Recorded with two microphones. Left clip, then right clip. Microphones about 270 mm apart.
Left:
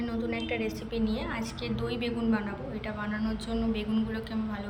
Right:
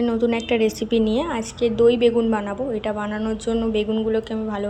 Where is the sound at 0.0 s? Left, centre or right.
Centre.